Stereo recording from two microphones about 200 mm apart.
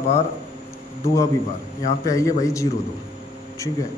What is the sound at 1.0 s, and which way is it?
A man's voice, 15° left (ahead or behind).